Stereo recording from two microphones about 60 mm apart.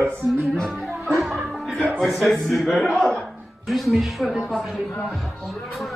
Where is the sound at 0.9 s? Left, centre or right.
Right.